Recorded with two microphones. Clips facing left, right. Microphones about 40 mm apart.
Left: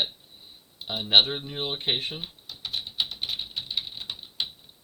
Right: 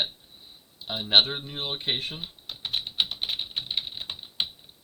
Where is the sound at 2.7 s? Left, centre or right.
Right.